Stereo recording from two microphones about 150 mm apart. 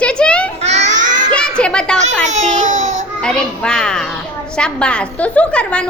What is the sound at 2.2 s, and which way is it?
Speech, 50° right (ahead or behind).